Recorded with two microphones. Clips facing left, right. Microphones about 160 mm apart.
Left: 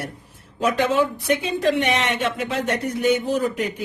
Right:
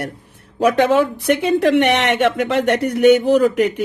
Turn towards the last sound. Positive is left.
turn(degrees=-85)